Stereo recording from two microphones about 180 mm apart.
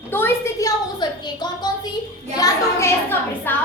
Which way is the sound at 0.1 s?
10° left (ahead or behind).